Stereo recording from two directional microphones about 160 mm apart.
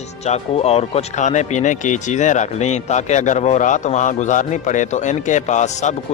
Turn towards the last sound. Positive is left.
turn(degrees=45)  # may be behind; listen again after turning